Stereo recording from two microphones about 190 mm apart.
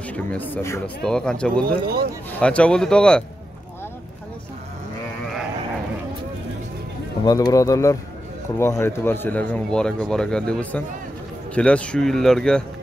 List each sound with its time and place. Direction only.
0.1 s speech: 10° left (ahead or behind)
1.7 s speech: 55° right (ahead or behind)
2.4 s speech: 5° left (ahead or behind)
7.2 s speech: 20° left (ahead or behind); by 12.6 s 5° left (ahead or behind)